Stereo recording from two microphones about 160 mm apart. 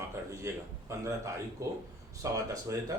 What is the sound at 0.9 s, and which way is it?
Speech, 20° right (ahead or behind).